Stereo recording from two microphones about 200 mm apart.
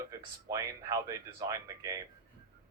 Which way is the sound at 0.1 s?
15° right (ahead or behind).